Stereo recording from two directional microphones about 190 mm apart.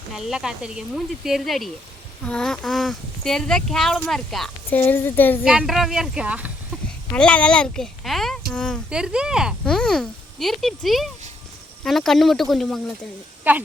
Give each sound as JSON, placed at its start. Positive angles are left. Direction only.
{"t": 0.1, "sound": "speech", "side_deg": -5}
{"t": 5.5, "sound": "speech", "side_deg": 0}
{"t": 7.1, "sound": "speech", "side_deg": 5}
{"t": 13.5, "sound": "a woman's voice", "side_deg": -10}